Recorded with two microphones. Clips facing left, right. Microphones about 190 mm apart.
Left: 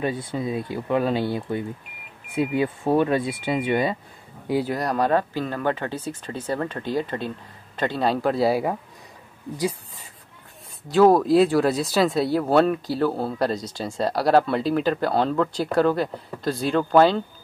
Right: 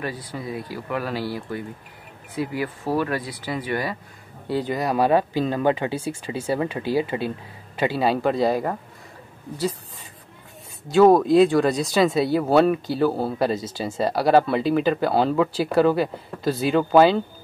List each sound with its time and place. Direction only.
0.0 s speech: 25° left (ahead or behind)
4.5 s speech: 10° left (ahead or behind)
4.7 s speech: 5° right (ahead or behind)
10.9 s speech: centre (ahead or behind)